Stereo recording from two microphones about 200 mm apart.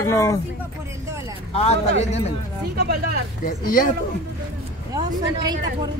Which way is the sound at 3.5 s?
45° left (ahead or behind).